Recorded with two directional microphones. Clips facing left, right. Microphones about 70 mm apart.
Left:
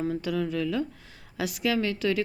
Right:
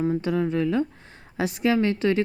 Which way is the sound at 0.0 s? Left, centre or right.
Right.